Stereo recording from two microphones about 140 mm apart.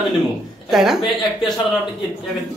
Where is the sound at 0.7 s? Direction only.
5° right (ahead or behind).